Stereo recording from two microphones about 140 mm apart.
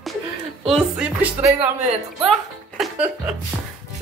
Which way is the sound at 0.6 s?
5° right (ahead or behind).